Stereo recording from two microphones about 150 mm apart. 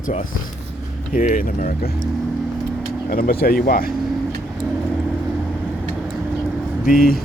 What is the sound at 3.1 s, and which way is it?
Speech, 85° left.